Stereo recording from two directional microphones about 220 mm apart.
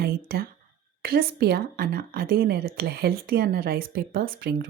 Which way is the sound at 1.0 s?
45° right (ahead or behind).